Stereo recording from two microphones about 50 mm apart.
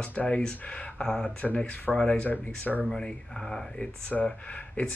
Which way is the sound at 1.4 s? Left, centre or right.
Left.